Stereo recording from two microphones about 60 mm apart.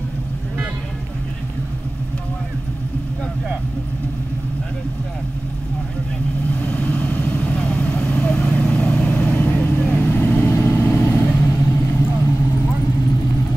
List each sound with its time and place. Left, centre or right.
6.5 s vehicle: left